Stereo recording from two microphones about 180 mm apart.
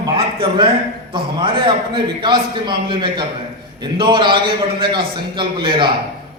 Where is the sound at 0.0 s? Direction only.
25° right (ahead or behind).